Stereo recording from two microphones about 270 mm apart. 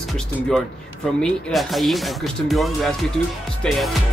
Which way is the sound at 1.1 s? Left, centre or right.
Centre.